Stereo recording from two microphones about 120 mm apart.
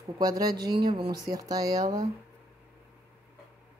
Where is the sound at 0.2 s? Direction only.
30° right (ahead or behind).